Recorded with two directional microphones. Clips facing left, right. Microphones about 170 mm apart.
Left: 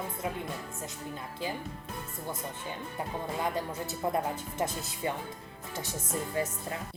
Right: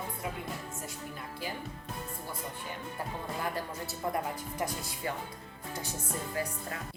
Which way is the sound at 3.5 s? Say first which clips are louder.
Left 3 dB; 20° left (ahead or behind).